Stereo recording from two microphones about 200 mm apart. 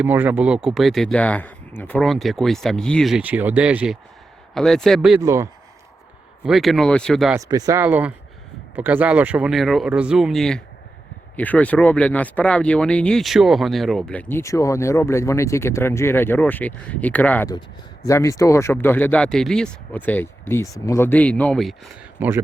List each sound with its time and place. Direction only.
0.0 s speech: 10° right (ahead or behind)
5.2 s speech: 15° right (ahead or behind)
6.4 s speech: centre (ahead or behind)
7.3 s speech: 20° right (ahead or behind); by 21.8 s centre (ahead or behind)
22.2 s speech: 10° right (ahead or behind)